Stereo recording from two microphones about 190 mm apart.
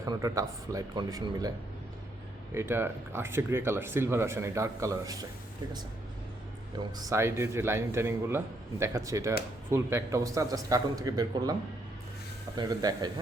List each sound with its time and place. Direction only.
0.0 s speech: 15° right (ahead or behind)
2.6 s speech: 10° right (ahead or behind)
6.7 s speech: 15° right (ahead or behind)
12.5 s speech: 20° right (ahead or behind)